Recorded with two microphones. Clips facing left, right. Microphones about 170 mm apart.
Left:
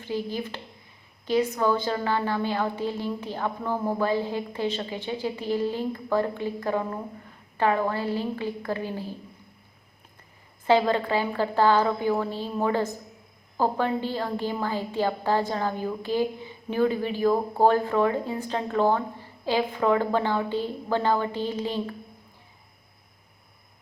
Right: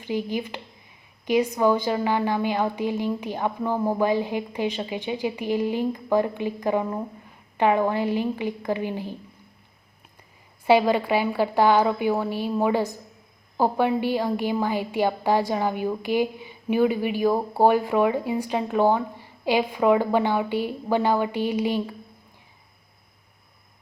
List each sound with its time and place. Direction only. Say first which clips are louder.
0.0 s a woman's voice: right 3 dB; 15° right (ahead or behind)
10.7 s a woman's voice: right 3 dB; 10° right (ahead or behind)